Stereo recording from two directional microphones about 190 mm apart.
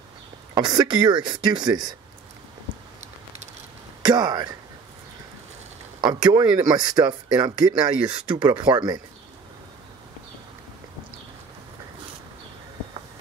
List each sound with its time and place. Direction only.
0.6 s speech: 20° right (ahead or behind)
4.0 s speech: 20° right (ahead or behind)
5.9 s speech: 20° right (ahead or behind)